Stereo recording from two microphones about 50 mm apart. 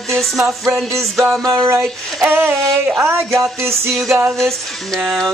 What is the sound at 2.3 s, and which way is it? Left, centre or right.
Speech, right.